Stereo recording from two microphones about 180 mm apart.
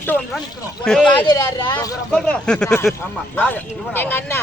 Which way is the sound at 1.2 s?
20° left (ahead or behind).